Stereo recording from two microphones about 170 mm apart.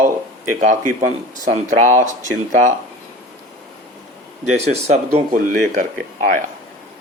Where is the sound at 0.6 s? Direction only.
45° right (ahead or behind).